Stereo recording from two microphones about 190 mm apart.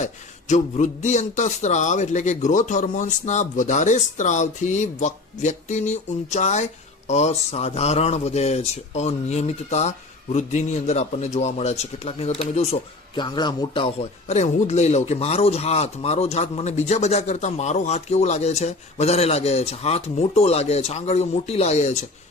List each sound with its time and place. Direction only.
0.0 s speech: 40° left (ahead or behind)
13.1 s speech: 25° left (ahead or behind)